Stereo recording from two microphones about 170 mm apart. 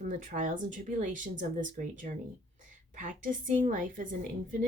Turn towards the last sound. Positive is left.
turn(degrees=-50)  # may be behind; listen again after turning